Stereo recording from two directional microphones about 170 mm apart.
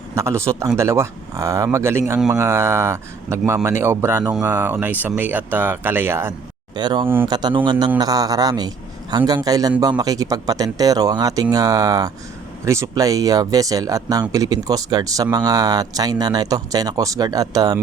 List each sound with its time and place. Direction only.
0.2 s speech: 15° right (ahead or behind)
6.7 s speech: 25° right (ahead or behind)